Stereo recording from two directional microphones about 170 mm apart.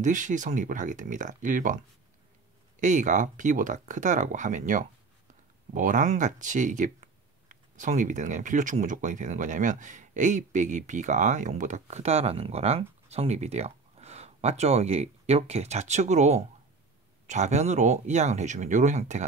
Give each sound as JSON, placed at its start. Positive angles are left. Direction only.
{"t": 0.0, "sound": "speech", "side_deg": -50}
{"t": 2.8, "sound": "speech", "side_deg": -45}